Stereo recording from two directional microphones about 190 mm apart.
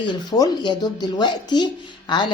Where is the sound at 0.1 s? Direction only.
20° left (ahead or behind).